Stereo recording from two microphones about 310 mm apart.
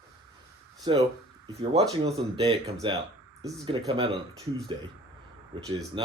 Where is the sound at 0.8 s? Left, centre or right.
Centre.